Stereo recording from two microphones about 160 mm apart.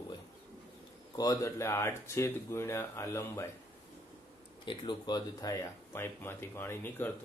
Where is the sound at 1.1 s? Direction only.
20° left (ahead or behind).